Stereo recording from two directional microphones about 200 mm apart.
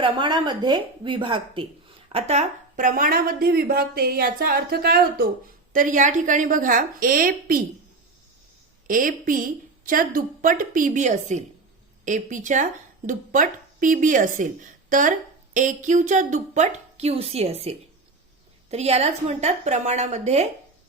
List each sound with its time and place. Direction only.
0.0 s a woman's voice: 25° right (ahead or behind); by 7.6 s 45° right (ahead or behind)
8.9 s a woman's voice: 45° right (ahead or behind)